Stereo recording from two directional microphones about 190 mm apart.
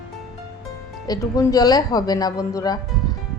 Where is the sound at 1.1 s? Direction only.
20° left (ahead or behind).